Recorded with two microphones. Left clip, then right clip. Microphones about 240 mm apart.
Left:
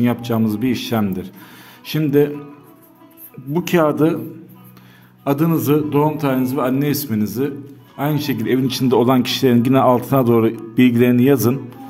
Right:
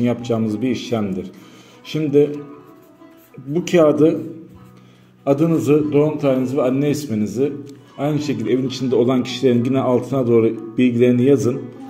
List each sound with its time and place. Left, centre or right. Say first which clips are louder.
0.0 s speech: left 1 dB; left
3.5 s speech: right 2 dB; left
5.2 s speech: right 2 dB; left